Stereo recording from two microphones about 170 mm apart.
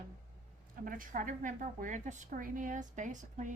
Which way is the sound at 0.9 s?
50° right (ahead or behind).